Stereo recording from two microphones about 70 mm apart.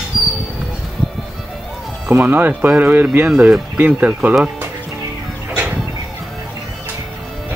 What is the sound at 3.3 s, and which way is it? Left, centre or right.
Speech, centre.